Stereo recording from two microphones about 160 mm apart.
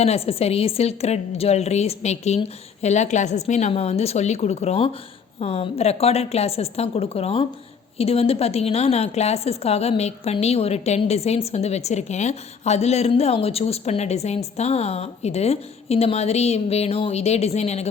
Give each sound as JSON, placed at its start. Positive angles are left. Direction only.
{"t": 0.0, "sound": "a woman's voice", "side_deg": 40}